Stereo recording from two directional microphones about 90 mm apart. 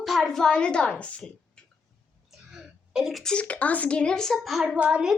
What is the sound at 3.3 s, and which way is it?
A woman's voice, 15° left (ahead or behind).